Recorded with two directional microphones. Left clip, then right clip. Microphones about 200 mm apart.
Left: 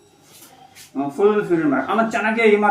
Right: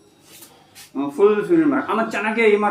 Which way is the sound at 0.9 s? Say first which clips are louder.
Right 1 dB; 20° right (ahead or behind).